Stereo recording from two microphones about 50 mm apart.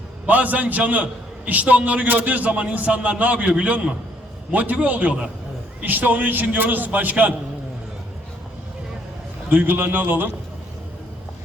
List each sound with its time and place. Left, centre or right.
0.3 s a man's voice: right
9.5 s a man's voice: right